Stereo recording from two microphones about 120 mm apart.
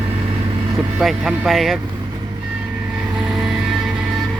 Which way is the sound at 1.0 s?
5° right (ahead or behind).